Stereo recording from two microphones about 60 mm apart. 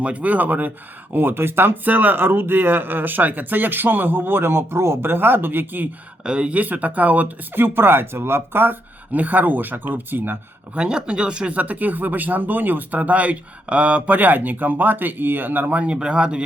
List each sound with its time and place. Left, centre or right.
0.0 s speech: right
6.2 s speech: centre
7.5 s speech: right
10.8 s speech: centre